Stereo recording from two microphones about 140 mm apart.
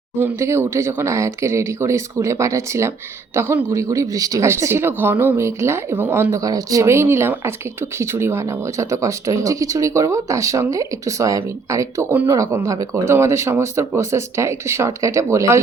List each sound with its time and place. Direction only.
0.2 s speech: 20° right (ahead or behind)